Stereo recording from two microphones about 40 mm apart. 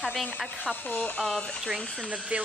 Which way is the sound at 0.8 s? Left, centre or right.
Left.